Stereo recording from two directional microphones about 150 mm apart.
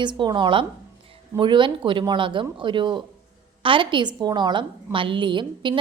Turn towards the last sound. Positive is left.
turn(degrees=-30)  # may be behind; listen again after turning